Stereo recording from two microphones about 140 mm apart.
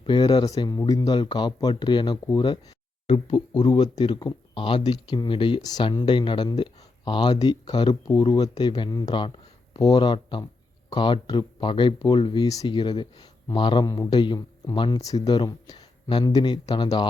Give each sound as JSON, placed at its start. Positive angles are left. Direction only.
{"t": 0.0, "sound": "a man's voice", "side_deg": 30}